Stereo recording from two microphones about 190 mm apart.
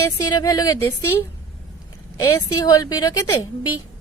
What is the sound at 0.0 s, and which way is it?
Speech, 15° left (ahead or behind).